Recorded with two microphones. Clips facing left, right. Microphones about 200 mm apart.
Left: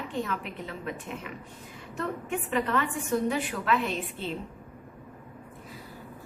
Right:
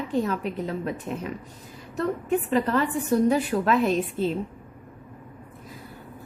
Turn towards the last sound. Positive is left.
turn(degrees=-40)  # may be behind; listen again after turning